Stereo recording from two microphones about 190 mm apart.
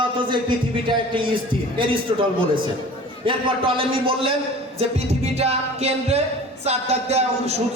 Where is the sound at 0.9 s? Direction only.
25° right (ahead or behind).